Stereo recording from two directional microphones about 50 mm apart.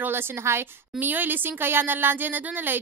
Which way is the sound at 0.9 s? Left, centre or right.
Right.